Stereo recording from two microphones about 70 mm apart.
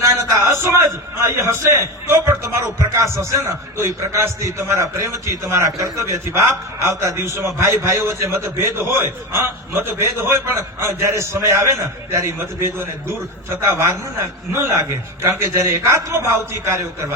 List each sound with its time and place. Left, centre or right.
0.0 s a man's voice: right